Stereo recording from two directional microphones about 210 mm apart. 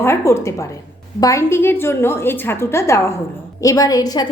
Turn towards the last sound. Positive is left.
turn(degrees=20)  # may be behind; listen again after turning